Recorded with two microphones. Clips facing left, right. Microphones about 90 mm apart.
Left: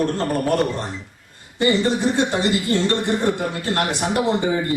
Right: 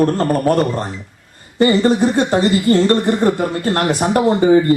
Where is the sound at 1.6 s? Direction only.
40° right (ahead or behind).